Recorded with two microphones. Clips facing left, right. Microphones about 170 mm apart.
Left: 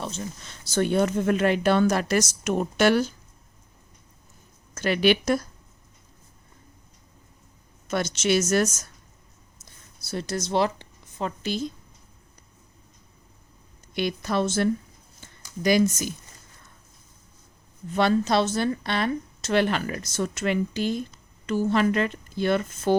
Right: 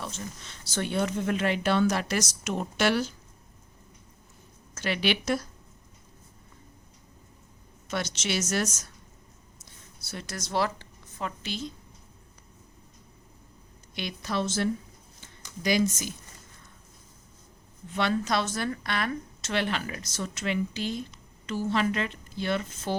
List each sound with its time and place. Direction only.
0.7 s speech: 45° left (ahead or behind)
4.7 s speech: 45° left (ahead or behind)
7.9 s speech: 50° left (ahead or behind)
10.1 s a woman's voice: 30° left (ahead or behind)
11.3 s speech: 45° left (ahead or behind)
13.9 s speech: 50° left (ahead or behind)
15.2 s a sound: 50° left (ahead or behind)
17.9 s a woman's voice: 35° left (ahead or behind)
19.5 s speech: 45° left (ahead or behind)